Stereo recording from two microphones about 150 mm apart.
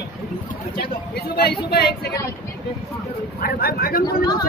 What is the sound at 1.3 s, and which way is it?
Speech, 90° left.